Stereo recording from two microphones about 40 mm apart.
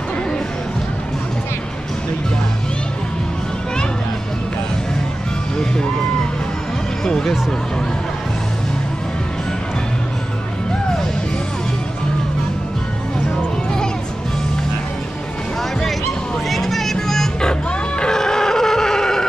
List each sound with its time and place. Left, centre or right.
5.6 s music: centre
7.1 s a sound: centre
16.4 s music: centre
17.4 s music: centre